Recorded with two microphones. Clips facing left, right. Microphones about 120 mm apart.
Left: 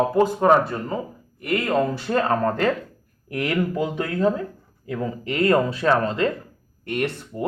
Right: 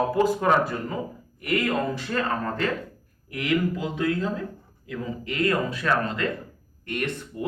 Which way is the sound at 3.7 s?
55° left (ahead or behind).